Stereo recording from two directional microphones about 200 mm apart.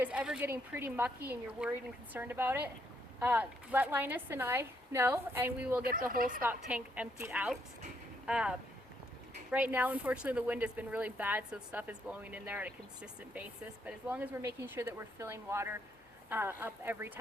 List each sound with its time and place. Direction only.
0.0 s speech: 5° right (ahead or behind)
5.8 s speech: 45° right (ahead or behind)
6.4 s speech: 10° right (ahead or behind)